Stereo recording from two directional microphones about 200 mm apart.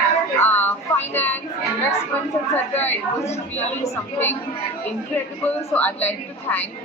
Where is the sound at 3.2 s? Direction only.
35° left (ahead or behind).